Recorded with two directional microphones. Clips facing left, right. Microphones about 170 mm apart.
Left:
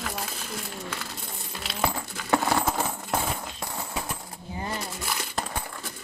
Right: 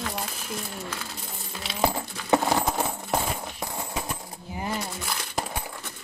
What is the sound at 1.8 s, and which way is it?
Coin, 20° right (ahead or behind).